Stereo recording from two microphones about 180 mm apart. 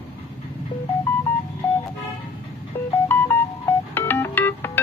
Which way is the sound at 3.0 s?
10° left (ahead or behind).